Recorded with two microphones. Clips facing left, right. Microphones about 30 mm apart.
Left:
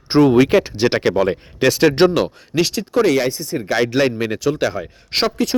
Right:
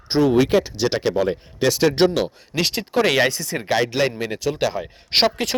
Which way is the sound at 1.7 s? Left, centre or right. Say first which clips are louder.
Left 4 dB; left.